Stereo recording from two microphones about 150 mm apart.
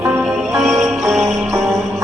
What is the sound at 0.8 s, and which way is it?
Music, centre (ahead or behind).